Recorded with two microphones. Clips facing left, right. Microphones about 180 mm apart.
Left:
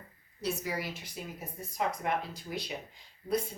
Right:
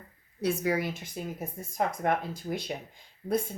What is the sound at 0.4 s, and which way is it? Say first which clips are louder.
A woman's voice: right 7 dB; 55° right (ahead or behind).